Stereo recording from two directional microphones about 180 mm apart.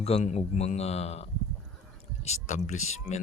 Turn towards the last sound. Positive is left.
turn(degrees=40)  # may be behind; listen again after turning